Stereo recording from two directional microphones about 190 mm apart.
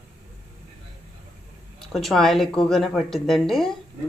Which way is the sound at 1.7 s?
Centre (ahead or behind).